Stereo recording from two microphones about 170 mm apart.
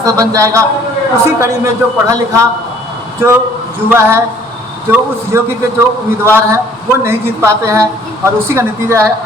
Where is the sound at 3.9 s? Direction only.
15° right (ahead or behind).